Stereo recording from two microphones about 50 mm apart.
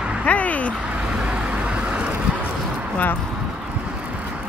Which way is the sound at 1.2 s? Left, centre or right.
Right.